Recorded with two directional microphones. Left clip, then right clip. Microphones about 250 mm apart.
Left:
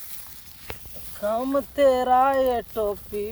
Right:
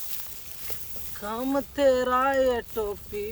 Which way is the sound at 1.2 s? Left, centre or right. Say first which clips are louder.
Left 5 dB; centre.